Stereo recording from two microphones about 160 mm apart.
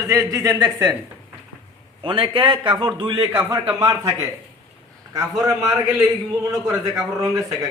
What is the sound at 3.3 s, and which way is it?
Speech, 15° right (ahead or behind).